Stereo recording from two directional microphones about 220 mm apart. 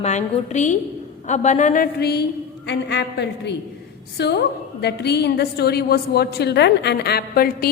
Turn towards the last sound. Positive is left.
turn(degrees=45)  # may be behind; listen again after turning